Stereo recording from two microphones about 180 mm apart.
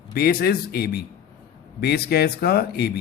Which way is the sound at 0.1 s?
60° left (ahead or behind).